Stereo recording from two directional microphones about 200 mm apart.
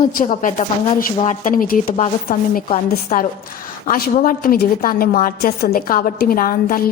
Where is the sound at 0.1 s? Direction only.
40° left (ahead or behind).